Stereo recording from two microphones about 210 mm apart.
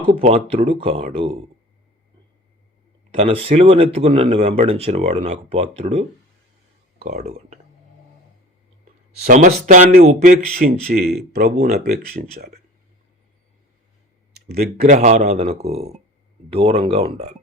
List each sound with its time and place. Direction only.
0.2 s speech: 30° right (ahead or behind)
3.2 s speech: 25° right (ahead or behind)
9.2 s speech: 40° right (ahead or behind)
14.3 s a sound: 45° right (ahead or behind)
14.8 s speech: 35° right (ahead or behind)